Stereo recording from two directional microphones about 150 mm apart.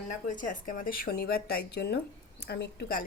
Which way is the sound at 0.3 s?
60° left (ahead or behind).